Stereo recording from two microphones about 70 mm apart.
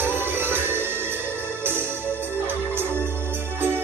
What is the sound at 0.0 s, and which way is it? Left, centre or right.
Music, right.